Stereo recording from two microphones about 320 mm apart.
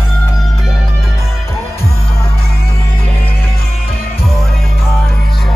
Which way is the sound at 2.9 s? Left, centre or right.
Left.